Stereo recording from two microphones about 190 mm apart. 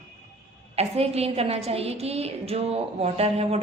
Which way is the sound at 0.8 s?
35° right (ahead or behind).